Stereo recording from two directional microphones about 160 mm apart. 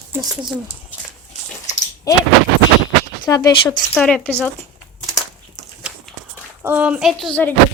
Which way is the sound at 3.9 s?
5° left (ahead or behind).